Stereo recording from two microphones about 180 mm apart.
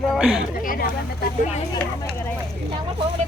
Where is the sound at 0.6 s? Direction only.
50° left (ahead or behind).